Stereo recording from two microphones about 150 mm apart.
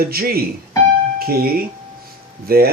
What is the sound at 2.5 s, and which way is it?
Speech, 90° right.